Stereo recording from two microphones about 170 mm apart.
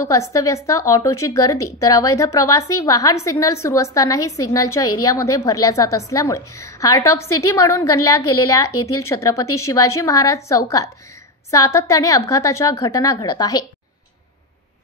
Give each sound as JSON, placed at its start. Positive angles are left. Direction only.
{"t": 0.1, "sound": "a woman's voice", "side_deg": 20}